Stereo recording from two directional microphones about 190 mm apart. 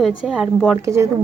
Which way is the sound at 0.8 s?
15° right (ahead or behind).